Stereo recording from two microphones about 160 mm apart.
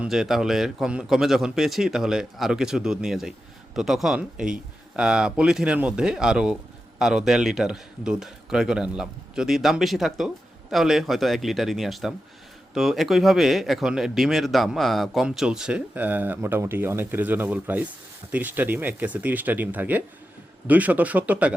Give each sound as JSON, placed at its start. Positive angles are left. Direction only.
{"t": 0.0, "sound": "speech", "side_deg": -5}